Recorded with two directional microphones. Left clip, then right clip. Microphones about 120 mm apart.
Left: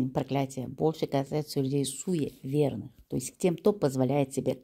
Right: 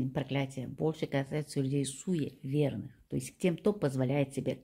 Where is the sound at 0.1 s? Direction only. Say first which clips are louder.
Left 5 dB; 45° left (ahead or behind).